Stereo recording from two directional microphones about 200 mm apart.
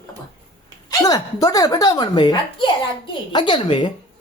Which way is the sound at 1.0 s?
20° left (ahead or behind).